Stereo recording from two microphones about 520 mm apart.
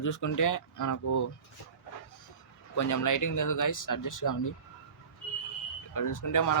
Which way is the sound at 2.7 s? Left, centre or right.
Left.